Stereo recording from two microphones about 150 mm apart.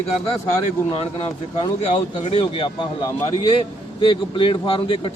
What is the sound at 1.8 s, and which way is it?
A man's voice, 45° left (ahead or behind).